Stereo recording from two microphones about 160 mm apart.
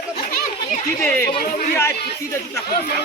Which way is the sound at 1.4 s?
70° left (ahead or behind).